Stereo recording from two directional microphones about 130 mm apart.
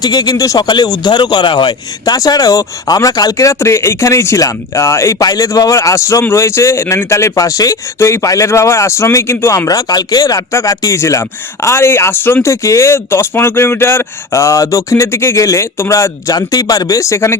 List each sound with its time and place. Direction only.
0.0 s speech: 30° left (ahead or behind)